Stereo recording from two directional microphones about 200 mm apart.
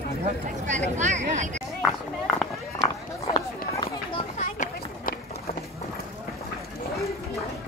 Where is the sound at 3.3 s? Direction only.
25° left (ahead or behind).